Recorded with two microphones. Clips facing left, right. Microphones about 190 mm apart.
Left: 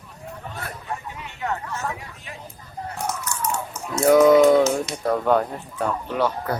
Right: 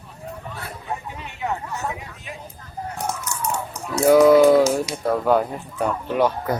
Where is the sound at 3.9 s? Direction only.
5° right (ahead or behind).